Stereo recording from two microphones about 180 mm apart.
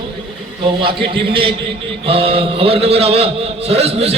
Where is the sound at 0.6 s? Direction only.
30° right (ahead or behind).